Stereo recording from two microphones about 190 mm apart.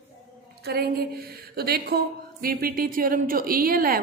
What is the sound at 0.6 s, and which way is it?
A woman's voice, 55° right (ahead or behind).